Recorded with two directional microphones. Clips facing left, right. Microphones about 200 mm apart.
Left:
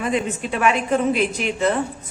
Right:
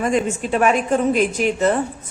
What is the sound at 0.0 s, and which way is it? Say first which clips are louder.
Speech: right 3 dB; 45° right (ahead or behind).